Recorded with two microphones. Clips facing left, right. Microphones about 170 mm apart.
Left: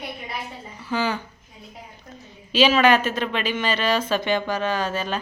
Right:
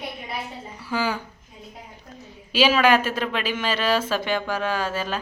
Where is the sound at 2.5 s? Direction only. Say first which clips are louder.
Left 1 dB; 10° right (ahead or behind).